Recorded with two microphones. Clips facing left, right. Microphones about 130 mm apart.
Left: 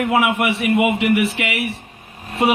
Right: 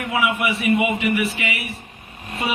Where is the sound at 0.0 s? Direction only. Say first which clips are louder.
Left 4 dB; 60° left (ahead or behind).